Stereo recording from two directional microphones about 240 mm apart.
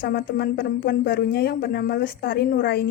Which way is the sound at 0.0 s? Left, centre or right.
Left.